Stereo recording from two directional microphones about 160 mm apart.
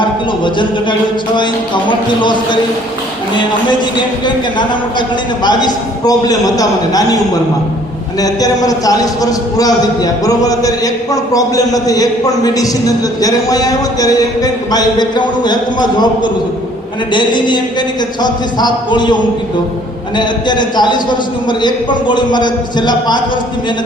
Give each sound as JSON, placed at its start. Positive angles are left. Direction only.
{"t": 0.0, "sound": "a sound", "side_deg": 30}
{"t": 4.5, "sound": "a man's voice", "side_deg": 30}
{"t": 8.2, "sound": "a man's voice", "side_deg": 25}